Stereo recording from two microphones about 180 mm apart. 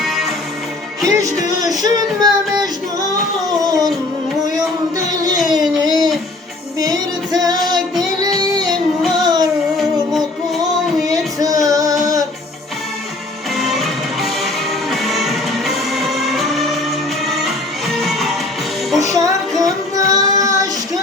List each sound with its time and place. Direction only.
0.0 s music: centre (ahead or behind)
1.0 s music: 20° right (ahead or behind)
4.9 s music: 20° right (ahead or behind)
5.5 s a sound: 25° right (ahead or behind)
6.7 s music: 20° right (ahead or behind)
7.4 s child singing: 20° right (ahead or behind)
9.0 s music: centre (ahead or behind)
9.2 s music: 20° right (ahead or behind)
9.7 s music: centre (ahead or behind)
10.6 s music: 20° right (ahead or behind)
11.7 s a sound: 20° right (ahead or behind)
13.6 s music: centre (ahead or behind)
18.0 s music: centre (ahead or behind)
18.9 s child singing: 20° right (ahead or behind)